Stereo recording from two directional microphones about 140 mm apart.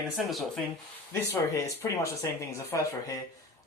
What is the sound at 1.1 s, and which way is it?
Speech, 20° left (ahead or behind).